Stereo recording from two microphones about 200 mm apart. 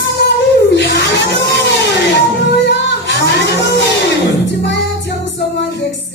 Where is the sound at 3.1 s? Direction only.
65° left (ahead or behind).